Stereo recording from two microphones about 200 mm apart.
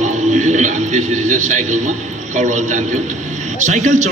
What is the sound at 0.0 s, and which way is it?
A man's voice, 35° right (ahead or behind).